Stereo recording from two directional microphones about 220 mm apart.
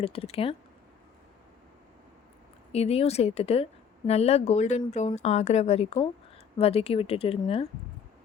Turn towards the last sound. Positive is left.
turn(degrees=25)  # may be behind; listen again after turning